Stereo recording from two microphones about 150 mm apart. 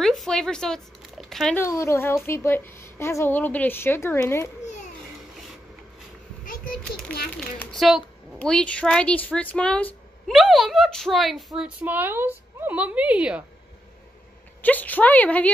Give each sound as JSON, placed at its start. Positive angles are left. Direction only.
{"t": 0.0, "sound": "a sound", "side_deg": 0}
{"t": 1.3, "sound": "speech", "side_deg": 0}
{"t": 1.6, "sound": "a woman's voice", "side_deg": 20}
{"t": 6.4, "sound": "a sound", "side_deg": 65}
{"t": 7.3, "sound": "a woman's voice", "side_deg": 0}
{"t": 14.6, "sound": "a woman's voice", "side_deg": 10}